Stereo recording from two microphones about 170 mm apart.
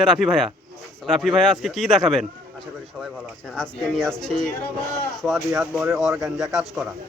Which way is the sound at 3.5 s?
5° left (ahead or behind).